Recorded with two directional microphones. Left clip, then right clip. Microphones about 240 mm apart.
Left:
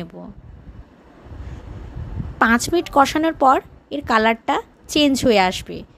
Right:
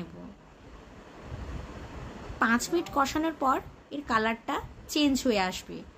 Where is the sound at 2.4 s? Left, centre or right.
Left.